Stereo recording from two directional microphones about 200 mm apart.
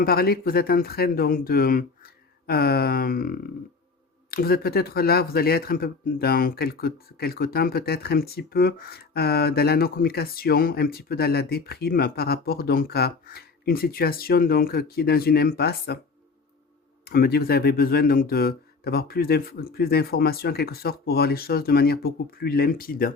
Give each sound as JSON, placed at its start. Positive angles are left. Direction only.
{"t": 0.0, "sound": "speech", "side_deg": 50}
{"t": 17.1, "sound": "speech", "side_deg": 50}